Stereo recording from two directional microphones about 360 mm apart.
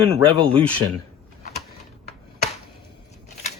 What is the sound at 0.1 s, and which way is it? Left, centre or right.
Speech, centre.